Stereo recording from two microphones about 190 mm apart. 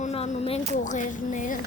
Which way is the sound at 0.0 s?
35° left (ahead or behind).